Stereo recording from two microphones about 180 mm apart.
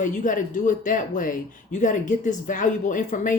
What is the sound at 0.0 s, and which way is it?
Speech, 45° left (ahead or behind).